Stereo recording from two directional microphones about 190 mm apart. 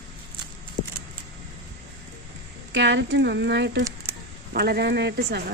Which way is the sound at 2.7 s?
70° right (ahead or behind).